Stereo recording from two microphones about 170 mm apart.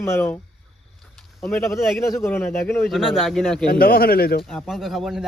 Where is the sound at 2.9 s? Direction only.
Centre (ahead or behind).